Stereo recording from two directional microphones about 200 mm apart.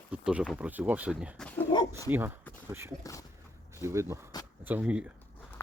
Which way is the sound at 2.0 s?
10° right (ahead or behind).